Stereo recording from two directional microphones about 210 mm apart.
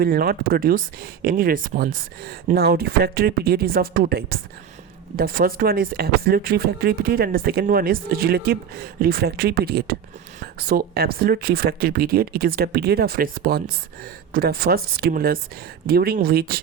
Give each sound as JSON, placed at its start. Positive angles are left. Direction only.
{"t": 0.0, "sound": "speech", "side_deg": -45}